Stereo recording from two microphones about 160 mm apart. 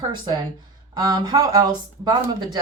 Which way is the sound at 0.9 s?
25° right (ahead or behind).